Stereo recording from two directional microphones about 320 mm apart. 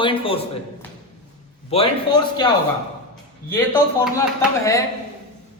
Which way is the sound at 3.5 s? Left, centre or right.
Centre.